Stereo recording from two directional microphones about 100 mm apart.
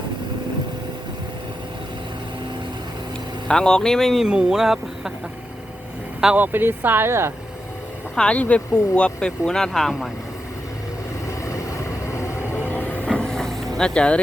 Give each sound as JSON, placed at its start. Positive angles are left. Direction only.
{"t": 3.5, "sound": "speech", "side_deg": 5}
{"t": 6.3, "sound": "speech", "side_deg": -20}
{"t": 8.1, "sound": "speech", "side_deg": 10}
{"t": 11.3, "sound": "vehicle", "side_deg": 30}
{"t": 13.1, "sound": "vehicle", "side_deg": 5}
{"t": 13.7, "sound": "speech", "side_deg": 10}